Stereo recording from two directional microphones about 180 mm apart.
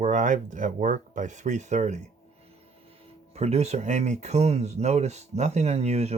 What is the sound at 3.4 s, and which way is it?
Speech, 35° right (ahead or behind).